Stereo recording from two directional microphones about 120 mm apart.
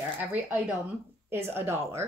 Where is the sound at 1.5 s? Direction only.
20° right (ahead or behind).